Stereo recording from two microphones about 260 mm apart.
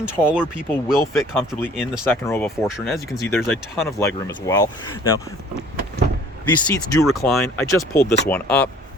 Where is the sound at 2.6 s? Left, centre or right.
Centre.